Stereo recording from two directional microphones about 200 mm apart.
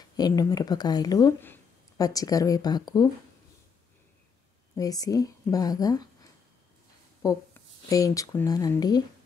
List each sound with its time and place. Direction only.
0.2 s speech: 20° left (ahead or behind)
4.7 s a woman's voice: 15° left (ahead or behind)
7.2 s a woman's voice: 15° left (ahead or behind)